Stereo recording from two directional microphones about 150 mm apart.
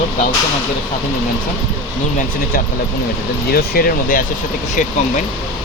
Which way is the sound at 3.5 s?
80° left.